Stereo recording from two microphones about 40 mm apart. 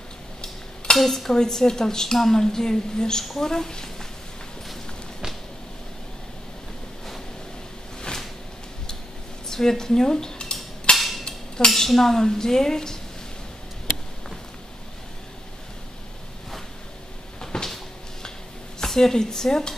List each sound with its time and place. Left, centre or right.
0.9 s dishes: centre
1.3 s a woman's voice: centre
9.5 s cutlery: centre
11.0 s a sound: centre
11.2 s cutlery: centre
17.4 s cupboard open or close: centre
18.9 s a woman's voice: centre